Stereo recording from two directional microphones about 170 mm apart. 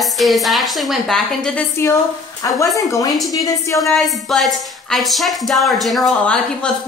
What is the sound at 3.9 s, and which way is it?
A woman's voice, centre (ahead or behind).